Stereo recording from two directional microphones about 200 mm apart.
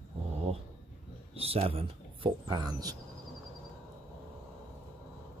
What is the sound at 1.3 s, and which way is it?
Speech, 30° right (ahead or behind).